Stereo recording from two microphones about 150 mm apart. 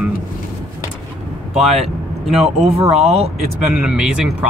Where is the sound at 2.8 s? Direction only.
40° right (ahead or behind).